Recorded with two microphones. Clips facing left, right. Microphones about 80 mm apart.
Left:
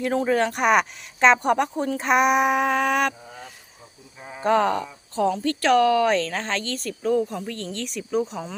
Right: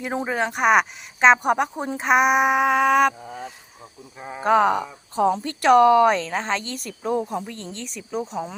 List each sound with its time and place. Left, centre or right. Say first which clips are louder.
0.1 s speech: left 3 dB; centre
0.3 s speech: right 4 dB; centre
2.0 s a sound: right 2 dB; centre
4.4 s speech: right 2 dB; centre
7.0 s speech: left 1 dB; right
7.4 s speech: left 3 dB; centre
7.9 s a sound: left 4 dB; centre